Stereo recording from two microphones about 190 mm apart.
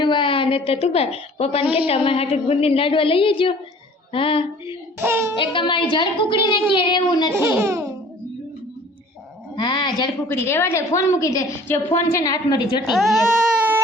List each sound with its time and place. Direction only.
0.0 s a woman's voice: 25° left (ahead or behind)
4.9 s a child's voice: 10° right (ahead or behind)
5.3 s speech: 25° left (ahead or behind)
7.3 s a child's voice: 10° right (ahead or behind)
9.6 s speech: 25° left (ahead or behind)
10.2 s a woman's voice: 15° left (ahead or behind)
12.9 s speech: centre (ahead or behind)